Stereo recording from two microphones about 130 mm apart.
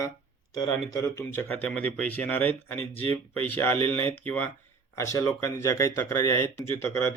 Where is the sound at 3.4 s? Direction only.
15° left (ahead or behind).